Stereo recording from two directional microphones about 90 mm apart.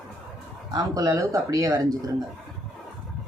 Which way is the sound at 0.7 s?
40° right (ahead or behind).